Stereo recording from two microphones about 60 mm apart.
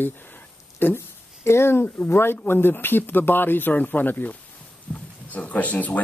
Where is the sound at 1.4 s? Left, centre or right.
Left.